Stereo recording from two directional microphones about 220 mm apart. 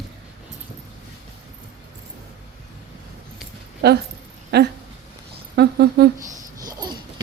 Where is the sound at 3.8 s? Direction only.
45° right (ahead or behind).